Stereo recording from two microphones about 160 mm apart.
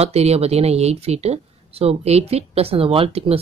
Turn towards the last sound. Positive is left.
turn(degrees=-40)  # may be behind; listen again after turning